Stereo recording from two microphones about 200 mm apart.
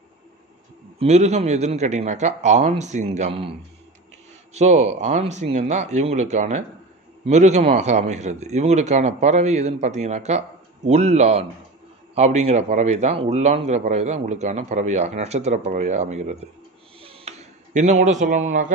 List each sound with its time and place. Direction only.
0.9 s a man's voice: 35° right (ahead or behind)
4.6 s a man's voice: 35° right (ahead or behind)
17.0 s a sound: 30° right (ahead or behind)